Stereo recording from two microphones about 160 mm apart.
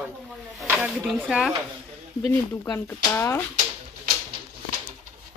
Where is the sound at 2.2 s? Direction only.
15° left (ahead or behind).